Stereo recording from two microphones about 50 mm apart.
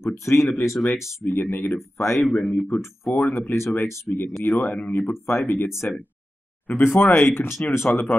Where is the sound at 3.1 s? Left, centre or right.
Left.